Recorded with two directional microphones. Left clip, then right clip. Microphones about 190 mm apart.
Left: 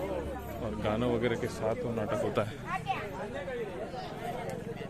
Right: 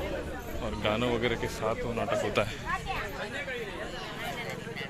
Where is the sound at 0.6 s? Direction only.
10° left (ahead or behind).